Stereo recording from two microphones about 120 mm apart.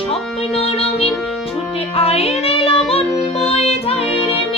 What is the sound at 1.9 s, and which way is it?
Child singing, 55° left (ahead or behind).